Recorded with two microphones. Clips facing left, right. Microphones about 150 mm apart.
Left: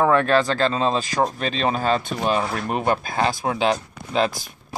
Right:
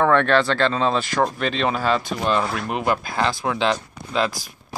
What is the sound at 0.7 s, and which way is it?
Speech, 35° left (ahead or behind).